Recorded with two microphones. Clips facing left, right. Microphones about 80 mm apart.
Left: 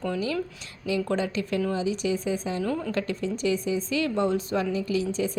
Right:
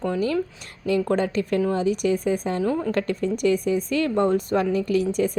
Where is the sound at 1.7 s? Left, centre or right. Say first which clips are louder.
Right 5 dB; right.